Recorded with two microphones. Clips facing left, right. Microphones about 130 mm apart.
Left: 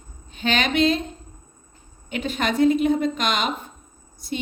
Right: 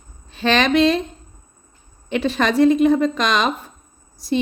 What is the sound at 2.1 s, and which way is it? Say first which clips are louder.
A woman's voice: right 6 dB; 90° right.